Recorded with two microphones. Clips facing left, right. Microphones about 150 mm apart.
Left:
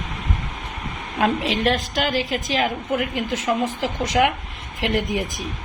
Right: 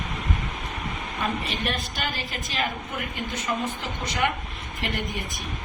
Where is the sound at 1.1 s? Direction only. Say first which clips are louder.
Left 9 dB; 90° left.